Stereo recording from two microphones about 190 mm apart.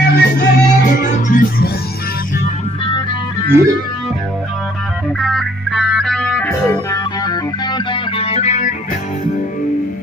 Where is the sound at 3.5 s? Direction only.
10° right (ahead or behind).